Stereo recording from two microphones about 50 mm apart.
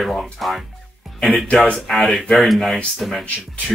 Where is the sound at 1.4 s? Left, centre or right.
Left.